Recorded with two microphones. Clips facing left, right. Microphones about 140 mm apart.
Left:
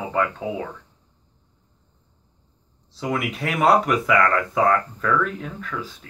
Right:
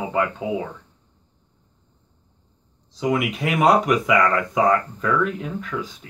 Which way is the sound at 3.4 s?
10° right (ahead or behind).